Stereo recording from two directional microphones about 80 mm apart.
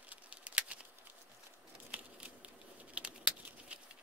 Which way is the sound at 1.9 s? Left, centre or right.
Centre.